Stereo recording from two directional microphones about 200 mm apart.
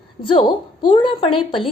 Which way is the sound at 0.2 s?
25° left (ahead or behind).